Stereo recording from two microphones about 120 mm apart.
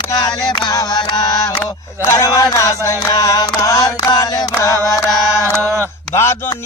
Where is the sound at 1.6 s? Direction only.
25° left (ahead or behind).